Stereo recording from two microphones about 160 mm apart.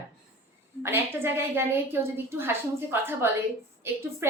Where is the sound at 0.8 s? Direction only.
15° right (ahead or behind).